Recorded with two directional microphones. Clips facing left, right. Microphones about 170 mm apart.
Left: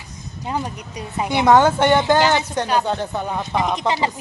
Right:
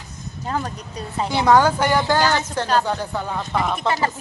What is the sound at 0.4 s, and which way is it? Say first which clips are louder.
Speech: left 1 dB; 15° left (ahead or behind).